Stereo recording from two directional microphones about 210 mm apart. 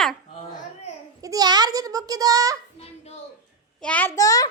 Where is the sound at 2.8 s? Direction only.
30° left (ahead or behind).